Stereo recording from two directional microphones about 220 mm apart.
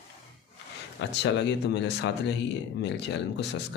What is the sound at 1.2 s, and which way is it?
Speech, 50° left (ahead or behind).